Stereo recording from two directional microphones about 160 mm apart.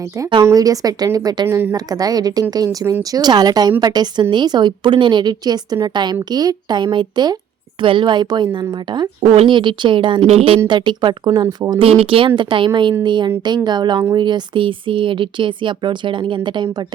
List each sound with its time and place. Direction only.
0.4 s a woman's voice: 20° right (ahead or behind)
11.8 s a woman's voice: 35° right (ahead or behind)